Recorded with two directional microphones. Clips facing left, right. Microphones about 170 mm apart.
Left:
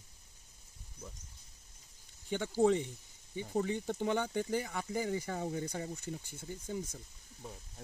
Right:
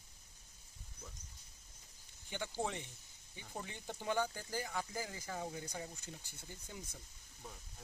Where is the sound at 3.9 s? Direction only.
55° left (ahead or behind).